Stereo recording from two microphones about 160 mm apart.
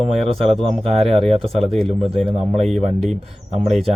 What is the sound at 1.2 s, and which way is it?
Speech, 40° right (ahead or behind).